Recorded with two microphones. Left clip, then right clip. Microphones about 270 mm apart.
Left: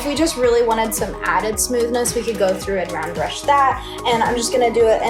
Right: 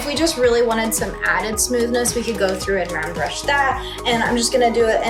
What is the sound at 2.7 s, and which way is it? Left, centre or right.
Speech, left.